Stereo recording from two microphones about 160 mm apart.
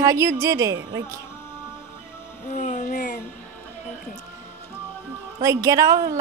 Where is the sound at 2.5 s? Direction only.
50° left (ahead or behind).